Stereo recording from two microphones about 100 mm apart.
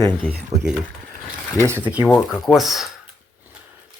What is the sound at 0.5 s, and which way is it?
Speech, 90° right.